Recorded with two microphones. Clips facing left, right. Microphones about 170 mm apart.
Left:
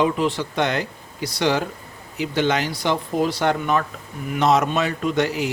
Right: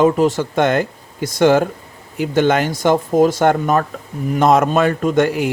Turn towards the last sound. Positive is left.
turn(degrees=-50)  # may be behind; listen again after turning